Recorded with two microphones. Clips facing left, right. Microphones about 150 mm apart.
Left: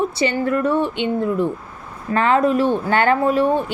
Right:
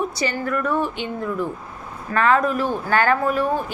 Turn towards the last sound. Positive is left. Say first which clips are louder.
# left 4 dB
turn(degrees=25)  # may be behind; listen again after turning